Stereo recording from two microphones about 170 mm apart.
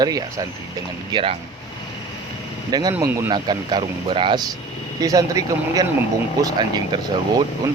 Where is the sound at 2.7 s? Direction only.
25° right (ahead or behind).